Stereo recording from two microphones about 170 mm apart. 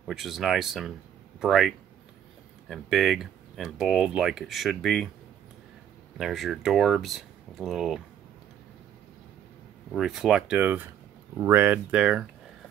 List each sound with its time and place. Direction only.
0.0 s speech: centre (ahead or behind)
2.7 s speech: centre (ahead or behind)
6.1 s speech: centre (ahead or behind)
9.9 s speech: 5° right (ahead or behind)